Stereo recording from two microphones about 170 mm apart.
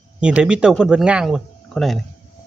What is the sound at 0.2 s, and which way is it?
Speech, 5° right (ahead or behind).